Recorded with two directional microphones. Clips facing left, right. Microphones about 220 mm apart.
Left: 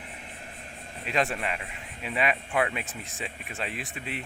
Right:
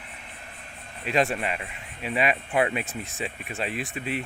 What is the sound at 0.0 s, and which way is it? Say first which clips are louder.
Vehicle: left 2 dB; 40° left (ahead or behind).